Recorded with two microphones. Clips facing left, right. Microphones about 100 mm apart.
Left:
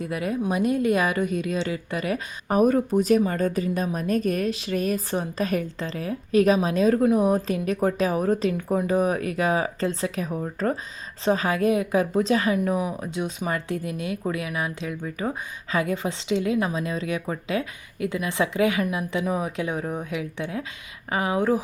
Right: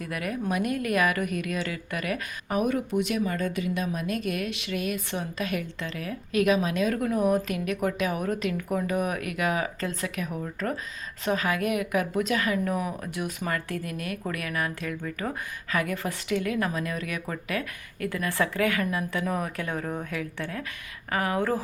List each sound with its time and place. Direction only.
0.0 s speech: 25° left (ahead or behind)
2.5 s a woman's voice: 40° left (ahead or behind); by 21.6 s 15° left (ahead or behind)